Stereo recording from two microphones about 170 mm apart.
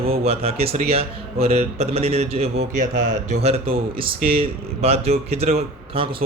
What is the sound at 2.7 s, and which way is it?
Speech, 45° right (ahead or behind).